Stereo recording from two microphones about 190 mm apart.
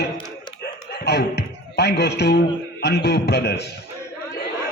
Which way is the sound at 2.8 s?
60° left (ahead or behind).